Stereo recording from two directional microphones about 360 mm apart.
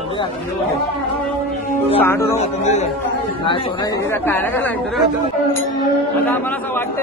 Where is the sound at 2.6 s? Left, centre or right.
Centre.